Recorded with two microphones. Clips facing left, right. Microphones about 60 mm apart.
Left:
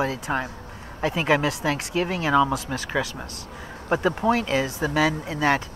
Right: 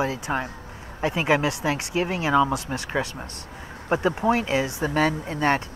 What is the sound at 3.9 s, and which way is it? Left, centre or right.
Speech, centre.